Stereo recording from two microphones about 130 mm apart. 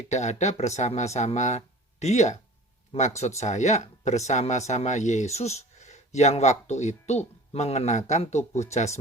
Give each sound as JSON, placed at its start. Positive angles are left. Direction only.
{"t": 0.1, "sound": "speech", "side_deg": 65}